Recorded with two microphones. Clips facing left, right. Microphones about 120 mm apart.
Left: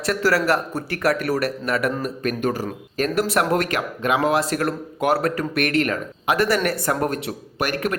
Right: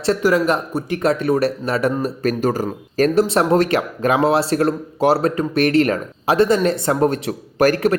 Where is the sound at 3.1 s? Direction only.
25° right (ahead or behind).